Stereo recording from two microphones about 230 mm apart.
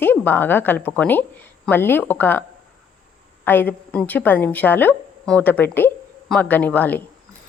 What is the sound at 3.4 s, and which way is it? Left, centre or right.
A woman's voice, centre.